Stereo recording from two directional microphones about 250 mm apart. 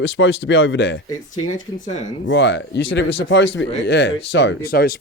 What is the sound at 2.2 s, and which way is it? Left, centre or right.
A man's voice, left.